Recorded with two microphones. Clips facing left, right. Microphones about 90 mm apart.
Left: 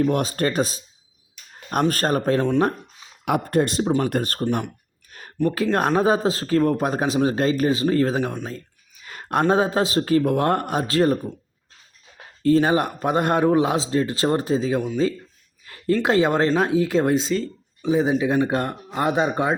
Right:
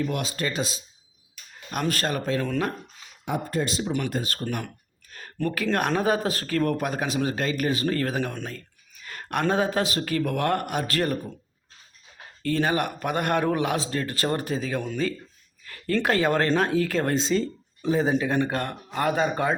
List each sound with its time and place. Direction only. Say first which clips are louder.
0.0 s speech: left 7 dB; 45° left (ahead or behind)
1.8 s speech: left 6 dB; 40° left (ahead or behind)
2.4 s speech: left 7 dB; 25° left (ahead or behind)
3.2 s speech: left 7 dB; 65° left (ahead or behind); by 4.4 s 50° left (ahead or behind)
4.4 s speech: left 7 dB; 25° left (ahead or behind)
5.1 s a sound: left 6 dB; 15° left (ahead or behind)
6.0 s speech: left 5 dB; 25° left (ahead or behind)
12.4 s speech: left 6 dB; 25° left (ahead or behind)
16.5 s speech: left 3 dB; 10° left (ahead or behind)
17.2 s speech: left 1 dB; centre (ahead or behind); by 19.5 s 20° left (ahead or behind)